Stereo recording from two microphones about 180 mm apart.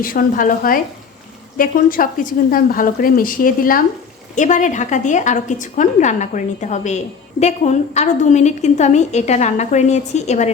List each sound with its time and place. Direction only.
0.0 s a woman's voice: 50° left (ahead or behind)